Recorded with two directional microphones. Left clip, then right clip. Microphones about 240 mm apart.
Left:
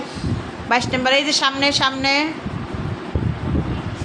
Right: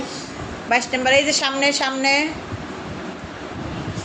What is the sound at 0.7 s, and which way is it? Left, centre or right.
A woman's voice, centre.